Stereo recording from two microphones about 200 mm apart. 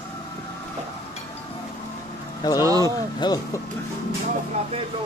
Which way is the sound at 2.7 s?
20° left (ahead or behind).